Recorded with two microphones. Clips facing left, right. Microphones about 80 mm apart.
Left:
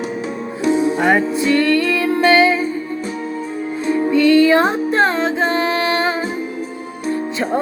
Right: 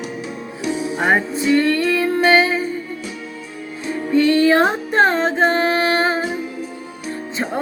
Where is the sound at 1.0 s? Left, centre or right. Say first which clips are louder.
Left 3 dB; right.